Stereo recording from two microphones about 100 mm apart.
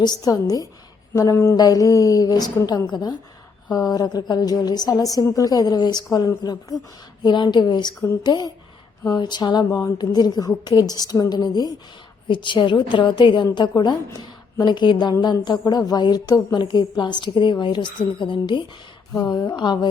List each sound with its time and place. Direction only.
0.0 s a woman's voice: 40° left (ahead or behind)
9.6 s a woman's voice: 30° left (ahead or behind)
10.0 s a woman's voice: 40° left (ahead or behind)
12.3 s a woman's voice: 55° left (ahead or behind)
19.1 s a woman's voice: 40° left (ahead or behind)